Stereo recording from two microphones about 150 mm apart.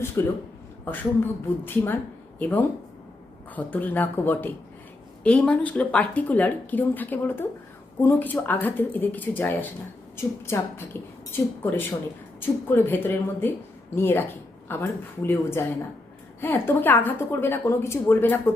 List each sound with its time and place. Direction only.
0.2 s a man's voice: 20° left (ahead or behind)